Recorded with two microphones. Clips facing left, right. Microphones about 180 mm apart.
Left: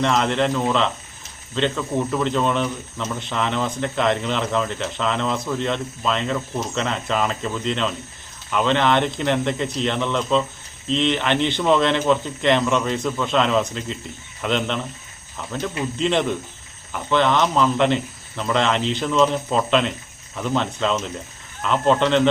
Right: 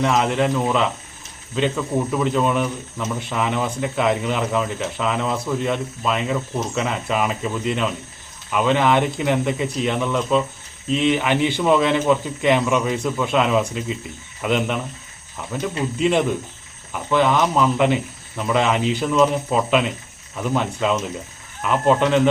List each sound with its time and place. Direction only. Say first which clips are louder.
0.0 s speech: right 1 dB; 5° right (ahead or behind)